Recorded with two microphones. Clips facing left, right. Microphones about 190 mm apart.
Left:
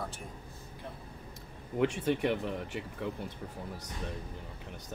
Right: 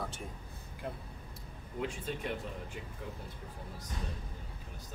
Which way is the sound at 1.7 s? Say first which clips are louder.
Left 9 dB; 75° left (ahead or behind).